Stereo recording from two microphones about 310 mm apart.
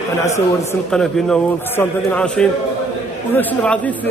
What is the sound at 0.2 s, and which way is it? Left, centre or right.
Speech, centre.